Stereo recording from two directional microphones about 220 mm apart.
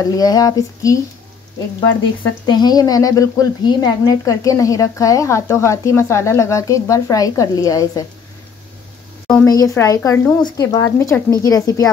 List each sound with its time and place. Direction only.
0.0 s speech: 15° left (ahead or behind)
2.2 s speech: 20° left (ahead or behind)
9.5 s speech: 15° left (ahead or behind)